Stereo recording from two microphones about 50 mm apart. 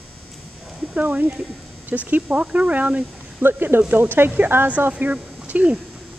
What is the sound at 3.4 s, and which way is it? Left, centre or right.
Speech, right.